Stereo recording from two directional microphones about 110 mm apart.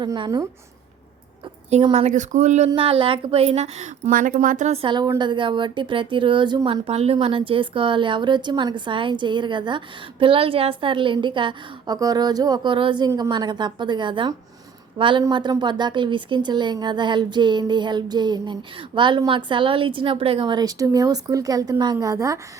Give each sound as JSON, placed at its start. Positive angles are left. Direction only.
{"t": 0.0, "sound": "a woman's voice", "side_deg": -40}
{"t": 1.9, "sound": "speech", "side_deg": -80}
{"t": 2.7, "sound": "a woman's voice", "side_deg": -55}
{"t": 4.9, "sound": "a woman's voice", "side_deg": -40}
{"t": 6.8, "sound": "a woman's voice", "side_deg": -65}
{"t": 11.9, "sound": "a woman's voice", "side_deg": -35}